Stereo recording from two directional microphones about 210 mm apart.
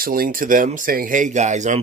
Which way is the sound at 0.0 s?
45° right (ahead or behind).